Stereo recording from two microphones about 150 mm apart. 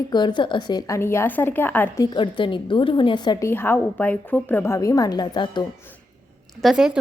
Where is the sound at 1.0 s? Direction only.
15° left (ahead or behind).